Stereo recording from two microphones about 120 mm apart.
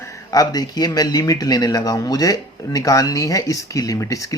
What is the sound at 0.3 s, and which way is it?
A man's voice, 30° left (ahead or behind).